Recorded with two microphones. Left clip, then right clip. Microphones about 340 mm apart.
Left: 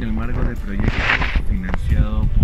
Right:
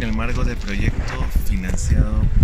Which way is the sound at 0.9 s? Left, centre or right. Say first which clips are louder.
Left 12 dB; left.